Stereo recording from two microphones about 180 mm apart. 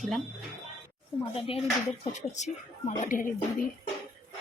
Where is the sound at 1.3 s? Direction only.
30° left (ahead or behind).